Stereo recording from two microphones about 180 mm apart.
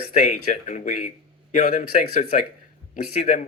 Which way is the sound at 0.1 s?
45° left (ahead or behind).